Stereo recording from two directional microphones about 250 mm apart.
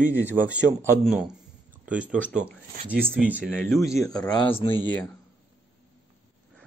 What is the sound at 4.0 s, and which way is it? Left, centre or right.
Speech, centre.